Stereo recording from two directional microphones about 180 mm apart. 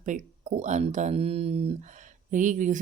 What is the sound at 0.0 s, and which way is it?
Speech, 45° right (ahead or behind).